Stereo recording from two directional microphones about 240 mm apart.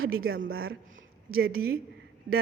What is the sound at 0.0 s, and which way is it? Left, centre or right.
Speech, right.